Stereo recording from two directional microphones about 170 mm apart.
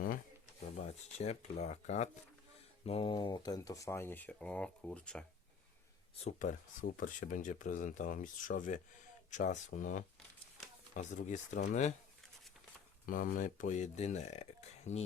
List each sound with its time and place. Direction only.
1.2 s speech: 40° left (ahead or behind); by 5.2 s 5° left (ahead or behind)
6.2 s speech: 50° left (ahead or behind)
13.1 s speech: 50° left (ahead or behind)